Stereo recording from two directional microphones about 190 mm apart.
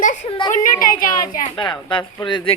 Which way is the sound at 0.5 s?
45° left (ahead or behind).